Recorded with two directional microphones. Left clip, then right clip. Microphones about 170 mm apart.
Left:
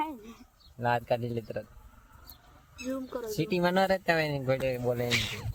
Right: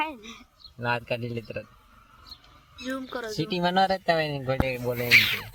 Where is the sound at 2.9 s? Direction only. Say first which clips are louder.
Right 3 dB; 25° right (ahead or behind).